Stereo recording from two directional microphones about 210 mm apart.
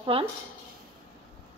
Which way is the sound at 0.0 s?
25° right (ahead or behind).